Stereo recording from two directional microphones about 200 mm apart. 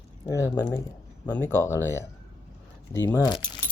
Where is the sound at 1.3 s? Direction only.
10° left (ahead or behind).